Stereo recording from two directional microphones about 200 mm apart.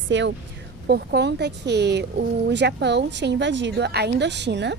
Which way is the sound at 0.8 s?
55° right (ahead or behind).